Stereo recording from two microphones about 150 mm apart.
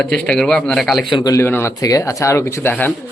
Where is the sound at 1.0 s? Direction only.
30° left (ahead or behind).